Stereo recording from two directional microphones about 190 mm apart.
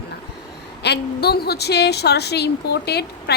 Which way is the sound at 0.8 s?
60° left (ahead or behind).